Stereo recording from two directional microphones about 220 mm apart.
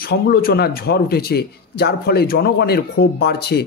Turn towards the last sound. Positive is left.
turn(degrees=45)  # may be behind; listen again after turning